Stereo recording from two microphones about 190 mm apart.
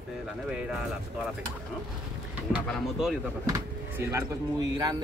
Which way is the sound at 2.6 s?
5° left (ahead or behind).